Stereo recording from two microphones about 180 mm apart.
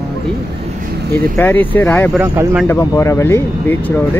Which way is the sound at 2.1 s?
5° right (ahead or behind).